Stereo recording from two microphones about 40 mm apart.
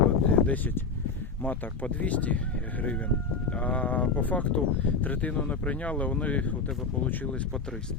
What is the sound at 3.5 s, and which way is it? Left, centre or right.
Speech, left.